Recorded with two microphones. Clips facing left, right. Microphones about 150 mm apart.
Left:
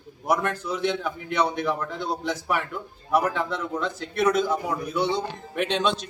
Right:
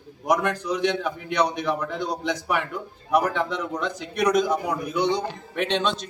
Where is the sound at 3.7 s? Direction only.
15° right (ahead or behind).